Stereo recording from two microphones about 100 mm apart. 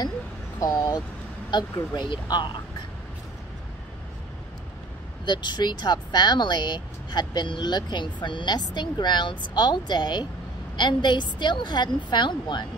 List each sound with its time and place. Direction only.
0.6 s speech: 40° left (ahead or behind)
5.2 s speech: 50° left (ahead or behind)